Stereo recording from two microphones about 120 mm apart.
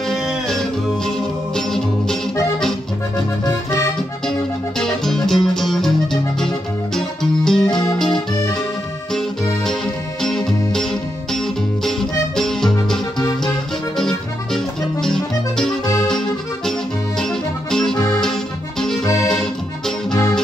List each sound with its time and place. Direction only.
0.1 s music: centre (ahead or behind)
4.3 s music: 5° left (ahead or behind)
7.0 s music: 5° left (ahead or behind)
10.2 s music: 5° left (ahead or behind)
13.9 s music: 5° left (ahead or behind)
16.1 s accordion: 5° left (ahead or behind)
17.2 s music: 5° left (ahead or behind)
17.9 s music: 30° left (ahead or behind)
18.2 s music: 5° left (ahead or behind)
19.2 s accordion: 5° left (ahead or behind)